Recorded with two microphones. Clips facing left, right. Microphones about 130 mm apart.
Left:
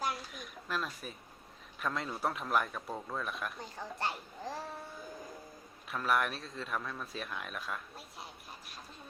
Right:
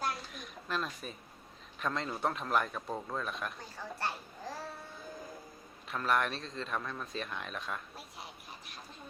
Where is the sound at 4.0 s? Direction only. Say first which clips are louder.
Left 1 dB; 15° left (ahead or behind).